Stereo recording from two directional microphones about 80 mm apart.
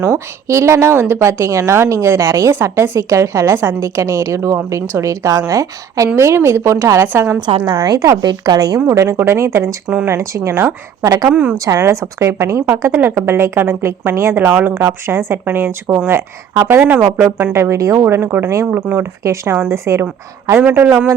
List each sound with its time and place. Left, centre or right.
0.4 s a woman's voice: right
7.9 s a woman's voice: right
8.2 s speech: right
8.8 s speech: right
9.9 s a woman's voice: right
10.2 s speech: right
11.0 s a woman's voice: right
18.0 s a woman's voice: right
19.2 s speech: right
20.6 s a woman's voice: right